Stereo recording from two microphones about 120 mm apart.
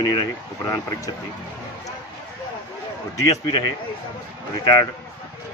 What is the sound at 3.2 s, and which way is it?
Speech, 30° left (ahead or behind).